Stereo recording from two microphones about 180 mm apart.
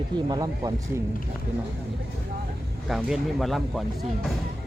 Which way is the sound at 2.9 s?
Centre (ahead or behind).